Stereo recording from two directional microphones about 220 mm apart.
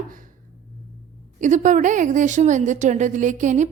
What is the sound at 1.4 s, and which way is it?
A woman's voice, 35° right (ahead or behind).